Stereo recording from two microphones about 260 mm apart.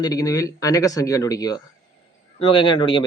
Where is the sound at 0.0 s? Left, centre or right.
Centre.